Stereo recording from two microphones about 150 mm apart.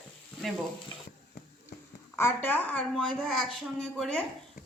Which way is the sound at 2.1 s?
15° left (ahead or behind).